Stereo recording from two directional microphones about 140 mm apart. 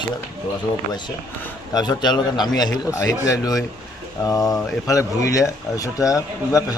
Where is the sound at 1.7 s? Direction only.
30° left (ahead or behind).